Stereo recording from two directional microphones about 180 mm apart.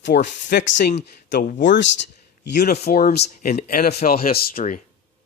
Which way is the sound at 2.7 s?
60° left (ahead or behind).